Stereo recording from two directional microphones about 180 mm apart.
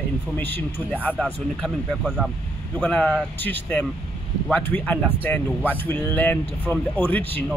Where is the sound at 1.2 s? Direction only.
Centre (ahead or behind).